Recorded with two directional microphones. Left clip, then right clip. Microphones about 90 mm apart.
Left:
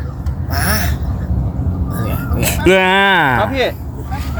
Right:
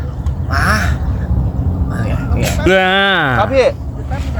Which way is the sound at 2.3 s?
5° right (ahead or behind).